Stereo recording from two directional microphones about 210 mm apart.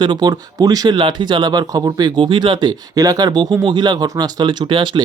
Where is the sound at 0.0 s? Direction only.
20° right (ahead or behind).